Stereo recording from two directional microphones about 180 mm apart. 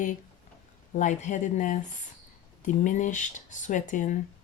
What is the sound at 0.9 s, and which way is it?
Speech, 45° left (ahead or behind).